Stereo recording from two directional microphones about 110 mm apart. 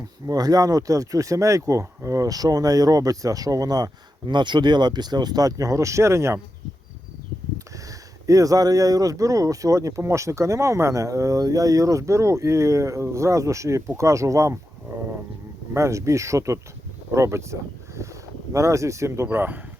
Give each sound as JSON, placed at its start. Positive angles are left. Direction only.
{"t": 0.3, "sound": "speech", "side_deg": -35}
{"t": 7.9, "sound": "speech", "side_deg": -30}
{"t": 15.7, "sound": "speech", "side_deg": -25}